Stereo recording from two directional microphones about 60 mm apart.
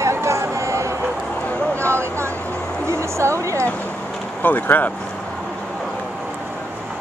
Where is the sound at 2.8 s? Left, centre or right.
Right.